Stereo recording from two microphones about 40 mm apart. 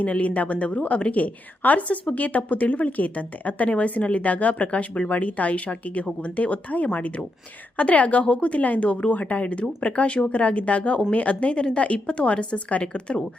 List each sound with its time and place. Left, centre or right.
0.0 s speech: left